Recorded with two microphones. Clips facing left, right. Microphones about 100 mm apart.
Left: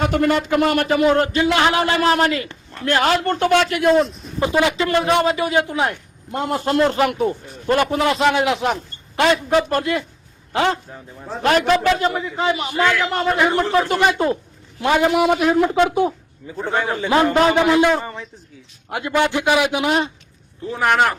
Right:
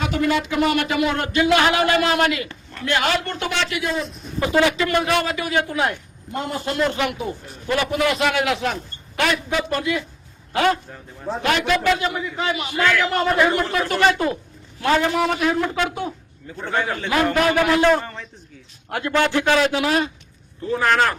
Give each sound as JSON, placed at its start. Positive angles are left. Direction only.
{"t": 0.1, "sound": "a man's voice", "side_deg": 50}
{"t": 4.4, "sound": "a man's voice", "side_deg": 20}
{"t": 6.7, "sound": "a man's voice", "side_deg": 45}
{"t": 9.5, "sound": "a man's voice", "side_deg": 45}
{"t": 10.5, "sound": "a man's voice", "side_deg": 25}
{"t": 11.4, "sound": "a man's voice", "side_deg": 40}